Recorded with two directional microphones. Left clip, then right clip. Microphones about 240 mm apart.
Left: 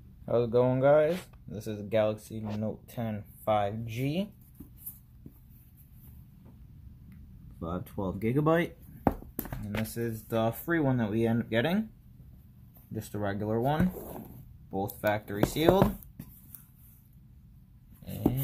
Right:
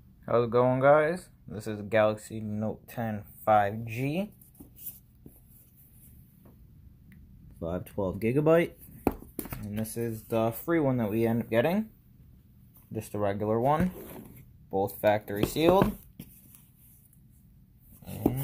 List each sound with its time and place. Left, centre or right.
0.2 s speech: centre
7.5 s speech: centre
12.9 s speech: centre
14.7 s speech: centre